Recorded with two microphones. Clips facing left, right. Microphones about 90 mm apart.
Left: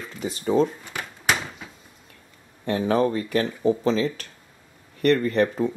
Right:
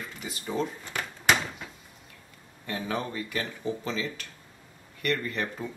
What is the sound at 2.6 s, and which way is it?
Speech, 40° left (ahead or behind).